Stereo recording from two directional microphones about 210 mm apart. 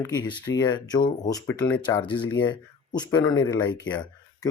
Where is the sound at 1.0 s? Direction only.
40° left (ahead or behind).